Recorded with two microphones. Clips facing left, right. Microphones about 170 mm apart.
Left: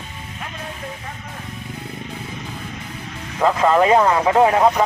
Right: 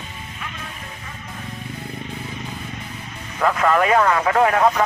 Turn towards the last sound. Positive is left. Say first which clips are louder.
# left 2 dB
turn(degrees=20)  # may be behind; listen again after turning